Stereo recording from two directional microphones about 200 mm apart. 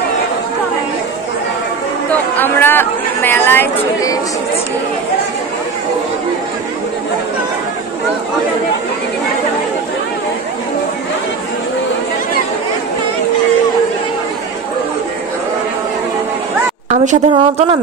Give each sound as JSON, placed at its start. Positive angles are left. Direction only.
{"t": 2.3, "sound": "speech", "side_deg": 10}
{"t": 16.9, "sound": "a woman's voice", "side_deg": -35}